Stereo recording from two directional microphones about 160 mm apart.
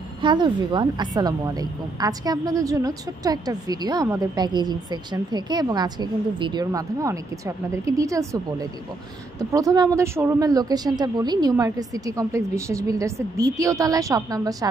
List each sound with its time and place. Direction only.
0.2 s a woman's voice: 30° right (ahead or behind)